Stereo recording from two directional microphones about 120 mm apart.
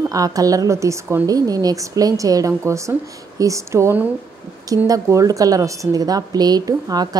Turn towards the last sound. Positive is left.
turn(degrees=-30)  # may be behind; listen again after turning